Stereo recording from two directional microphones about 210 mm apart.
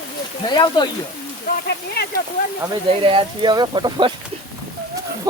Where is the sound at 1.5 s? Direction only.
50° left (ahead or behind).